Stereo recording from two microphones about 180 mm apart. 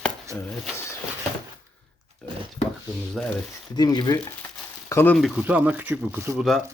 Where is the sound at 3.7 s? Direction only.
25° left (ahead or behind); by 6.4 s 15° right (ahead or behind).